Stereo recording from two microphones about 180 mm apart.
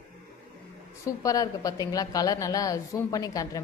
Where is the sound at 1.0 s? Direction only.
20° left (ahead or behind).